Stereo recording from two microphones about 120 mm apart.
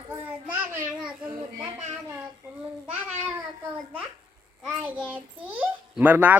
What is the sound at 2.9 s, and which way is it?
Babbling, 15° right (ahead or behind).